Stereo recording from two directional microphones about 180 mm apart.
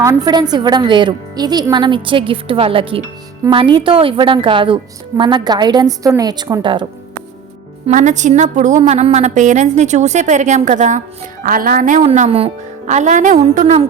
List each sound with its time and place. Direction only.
0.0 s a woman's voice: 20° right (ahead or behind)
7.9 s a woman's voice: 45° right (ahead or behind)